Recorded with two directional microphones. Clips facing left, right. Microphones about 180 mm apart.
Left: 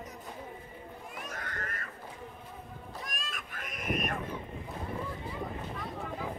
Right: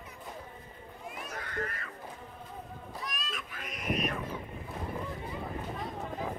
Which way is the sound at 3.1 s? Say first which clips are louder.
Right 2 dB; 45° left (ahead or behind).